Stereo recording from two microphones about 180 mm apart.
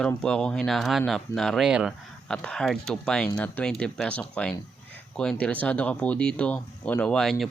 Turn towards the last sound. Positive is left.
turn(degrees=0)  # may be behind; listen again after turning